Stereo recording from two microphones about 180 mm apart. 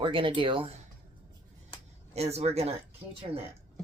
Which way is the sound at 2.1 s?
35° right (ahead or behind).